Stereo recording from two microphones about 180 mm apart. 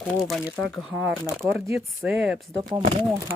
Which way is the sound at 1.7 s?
5° right (ahead or behind).